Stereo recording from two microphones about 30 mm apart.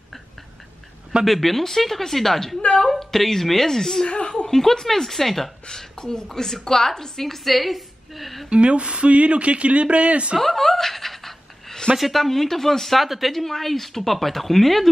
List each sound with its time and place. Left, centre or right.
1.2 s a woman's voice: centre
5.7 s a woman's voice: centre
8.5 s speech: right
10.4 s laughter: centre
12.0 s speech: centre